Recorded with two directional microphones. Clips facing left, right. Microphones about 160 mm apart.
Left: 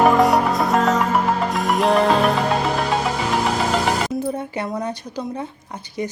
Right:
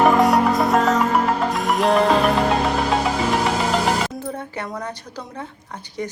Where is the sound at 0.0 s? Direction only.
Centre (ahead or behind).